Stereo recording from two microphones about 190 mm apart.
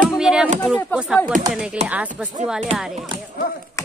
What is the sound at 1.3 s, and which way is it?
Speech, 45° right (ahead or behind).